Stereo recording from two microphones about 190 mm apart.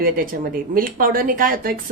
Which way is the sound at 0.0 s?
45° right (ahead or behind).